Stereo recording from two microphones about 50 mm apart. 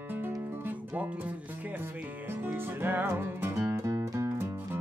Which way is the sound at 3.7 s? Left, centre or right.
Right.